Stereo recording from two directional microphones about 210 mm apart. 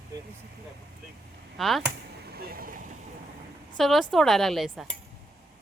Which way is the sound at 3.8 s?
Centre (ahead or behind).